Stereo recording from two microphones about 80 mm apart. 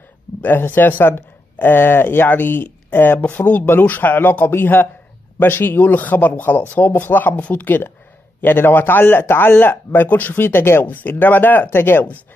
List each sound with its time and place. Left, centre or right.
0.4 s speech: left